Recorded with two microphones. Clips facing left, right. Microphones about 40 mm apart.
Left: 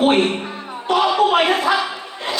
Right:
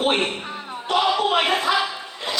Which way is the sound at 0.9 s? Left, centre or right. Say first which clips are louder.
Left 4 dB; left.